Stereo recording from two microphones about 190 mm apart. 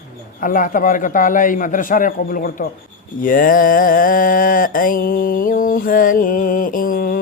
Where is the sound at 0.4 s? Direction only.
45° left (ahead or behind).